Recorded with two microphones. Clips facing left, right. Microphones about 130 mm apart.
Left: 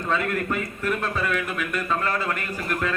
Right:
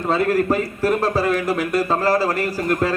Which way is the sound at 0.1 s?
35° right (ahead or behind).